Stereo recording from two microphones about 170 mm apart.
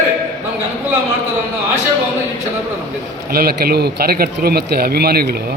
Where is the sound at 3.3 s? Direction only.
65° right (ahead or behind).